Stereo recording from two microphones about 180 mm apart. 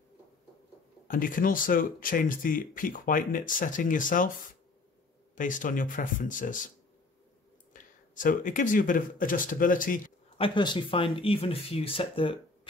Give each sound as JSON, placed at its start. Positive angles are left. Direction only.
{"t": 1.0, "sound": "speech", "side_deg": 50}
{"t": 5.3, "sound": "speech", "side_deg": 45}
{"t": 7.7, "sound": "speech", "side_deg": 45}
{"t": 10.3, "sound": "speech", "side_deg": 30}